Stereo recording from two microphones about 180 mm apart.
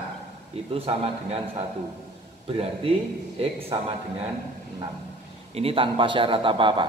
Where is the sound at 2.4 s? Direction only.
30° right (ahead or behind).